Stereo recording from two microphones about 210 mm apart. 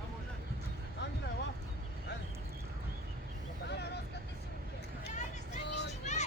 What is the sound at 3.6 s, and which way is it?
Vehicle, 55° left (ahead or behind).